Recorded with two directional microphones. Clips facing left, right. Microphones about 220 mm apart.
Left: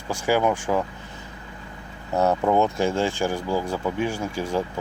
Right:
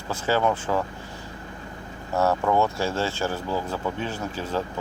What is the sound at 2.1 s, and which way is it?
Speech, 20° left (ahead or behind).